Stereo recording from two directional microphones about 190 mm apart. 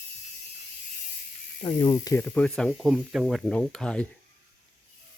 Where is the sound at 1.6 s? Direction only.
25° left (ahead or behind).